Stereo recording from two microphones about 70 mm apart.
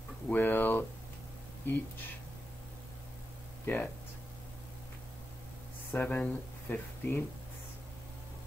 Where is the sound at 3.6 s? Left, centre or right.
Left.